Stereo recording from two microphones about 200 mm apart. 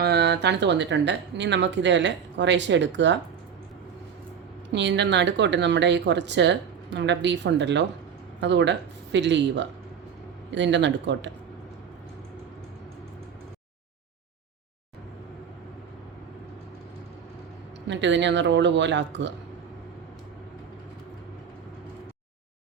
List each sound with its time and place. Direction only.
0.0 s speech: 55° right (ahead or behind)
4.7 s speech: 60° right (ahead or behind)
17.8 s speech: 65° right (ahead or behind)